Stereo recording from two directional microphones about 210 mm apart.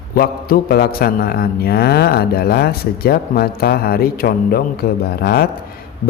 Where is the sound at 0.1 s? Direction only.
45° left (ahead or behind).